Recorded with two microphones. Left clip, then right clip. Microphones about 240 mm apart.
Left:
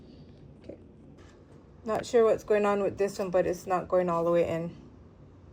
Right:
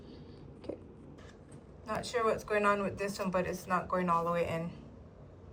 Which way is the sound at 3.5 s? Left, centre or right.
Left.